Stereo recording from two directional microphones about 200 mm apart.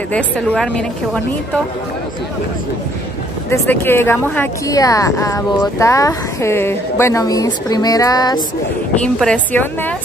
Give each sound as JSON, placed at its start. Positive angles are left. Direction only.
{"t": 0.1, "sound": "a woman's voice", "side_deg": 5}
{"t": 3.4, "sound": "speech", "side_deg": 10}
{"t": 9.0, "sound": "speech", "side_deg": 5}